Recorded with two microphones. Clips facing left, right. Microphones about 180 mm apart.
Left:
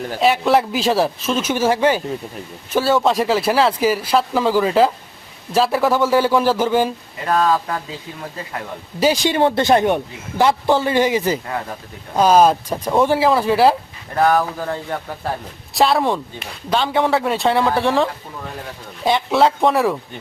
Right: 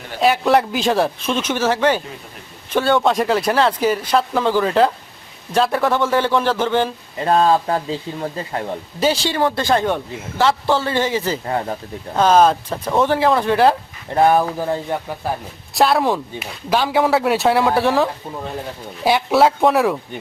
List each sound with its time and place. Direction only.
0.2 s speech: centre (ahead or behind)
7.3 s speech: 30° right (ahead or behind)
9.0 s speech: 15° left (ahead or behind)
14.1 s speech: 25° right (ahead or behind)
14.6 s speech: 15° right (ahead or behind)
15.7 s speech: centre (ahead or behind)